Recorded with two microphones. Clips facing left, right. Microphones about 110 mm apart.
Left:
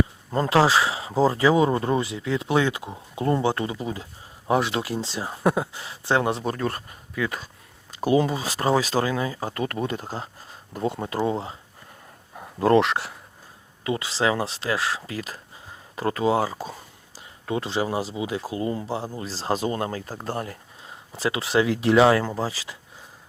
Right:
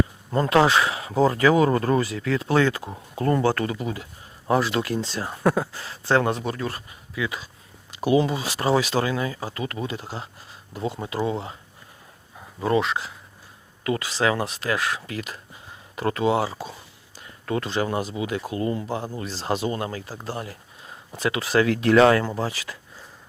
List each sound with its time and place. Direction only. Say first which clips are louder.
0.3 s speech: right 1 dB; 30° left (ahead or behind)
6.4 s speech: left 2 dB; 40° left (ahead or behind)
9.5 s speech: left 3 dB; 45° left (ahead or behind)
11.3 s speech: left 1 dB; 35° left (ahead or behind)
12.4 s speech: left 4 dB; 65° left (ahead or behind)
13.8 s speech: right 1 dB; 25° left (ahead or behind)
17.2 s speech: right 1 dB; 20° left (ahead or behind); by 20.6 s 45° left (ahead or behind)
20.8 s speech: even; 30° left (ahead or behind)
22.4 s speech: even; 35° left (ahead or behind)